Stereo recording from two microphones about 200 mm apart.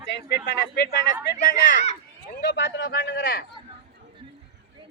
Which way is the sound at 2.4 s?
60° left (ahead or behind).